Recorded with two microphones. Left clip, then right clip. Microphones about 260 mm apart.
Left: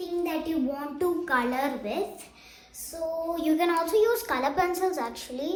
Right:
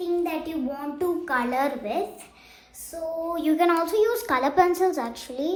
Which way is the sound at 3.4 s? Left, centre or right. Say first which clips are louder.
Right 4 dB; right.